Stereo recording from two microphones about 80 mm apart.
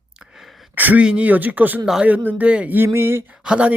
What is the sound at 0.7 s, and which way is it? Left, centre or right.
Speech, right.